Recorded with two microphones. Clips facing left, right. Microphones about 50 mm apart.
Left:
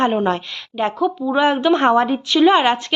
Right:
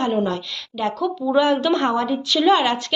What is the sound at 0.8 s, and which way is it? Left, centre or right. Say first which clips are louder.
A woman's voice: left 3 dB; left.